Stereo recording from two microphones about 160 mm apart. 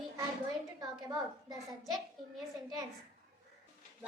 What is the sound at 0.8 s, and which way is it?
A child's voice, 25° right (ahead or behind).